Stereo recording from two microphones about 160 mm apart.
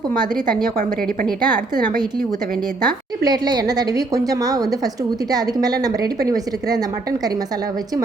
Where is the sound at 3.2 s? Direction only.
25° right (ahead or behind).